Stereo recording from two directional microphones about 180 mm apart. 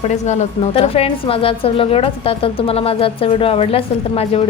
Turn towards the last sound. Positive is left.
turn(degrees=35)  # may be behind; listen again after turning